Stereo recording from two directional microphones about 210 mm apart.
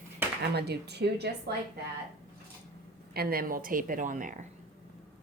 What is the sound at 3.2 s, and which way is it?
A woman's voice, 45° right (ahead or behind).